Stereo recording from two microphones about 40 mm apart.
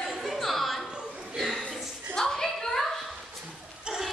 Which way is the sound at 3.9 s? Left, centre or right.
Centre.